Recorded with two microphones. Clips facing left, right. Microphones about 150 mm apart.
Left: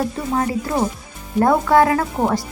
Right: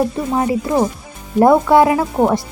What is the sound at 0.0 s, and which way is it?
Speech, 15° right (ahead or behind).